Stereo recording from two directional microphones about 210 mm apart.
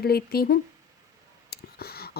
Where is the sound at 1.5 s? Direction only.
45° left (ahead or behind).